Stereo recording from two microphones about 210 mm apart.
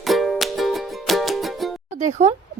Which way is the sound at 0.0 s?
Centre (ahead or behind).